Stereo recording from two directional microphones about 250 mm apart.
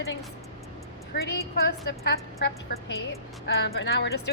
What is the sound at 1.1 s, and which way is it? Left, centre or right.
A woman's voice, left.